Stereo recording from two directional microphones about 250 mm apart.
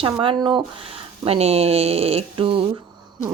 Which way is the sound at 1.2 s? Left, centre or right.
Right.